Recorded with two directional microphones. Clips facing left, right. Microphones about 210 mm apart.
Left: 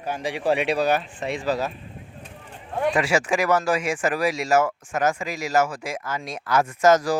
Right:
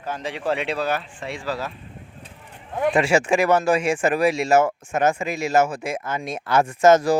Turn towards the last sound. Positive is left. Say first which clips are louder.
# right 3 dB
turn(degrees=-25)  # may be behind; listen again after turning